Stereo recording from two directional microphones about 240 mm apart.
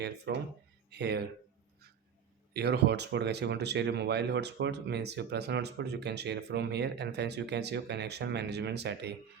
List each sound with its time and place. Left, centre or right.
0.0 s speech: right
2.5 s speech: right